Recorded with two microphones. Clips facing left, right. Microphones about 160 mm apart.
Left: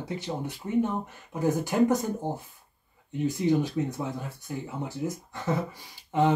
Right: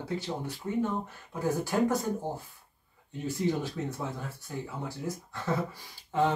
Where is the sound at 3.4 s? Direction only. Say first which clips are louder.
Left 4 dB; 15° left (ahead or behind).